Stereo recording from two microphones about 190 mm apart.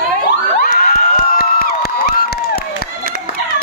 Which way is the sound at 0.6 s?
50° left (ahead or behind).